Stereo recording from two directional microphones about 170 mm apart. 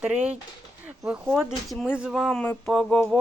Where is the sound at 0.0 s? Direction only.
10° right (ahead or behind).